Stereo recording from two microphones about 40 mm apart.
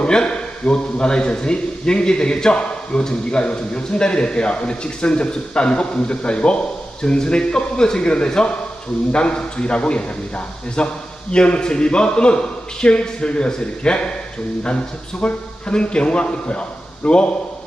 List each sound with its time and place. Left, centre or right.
0.0 s a man's voice: left